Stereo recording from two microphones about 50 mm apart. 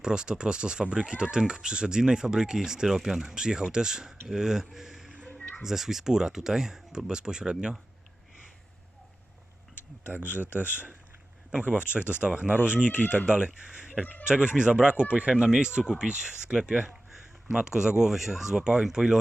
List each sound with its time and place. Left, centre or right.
0.0 s speech: centre
5.4 s a sound: left
5.6 s speech: centre
10.2 s speech: left
11.5 s speech: right
12.9 s speech: left
13.2 s speech: centre
14.0 s speech: left
14.3 s speech: centre
15.4 s speech: centre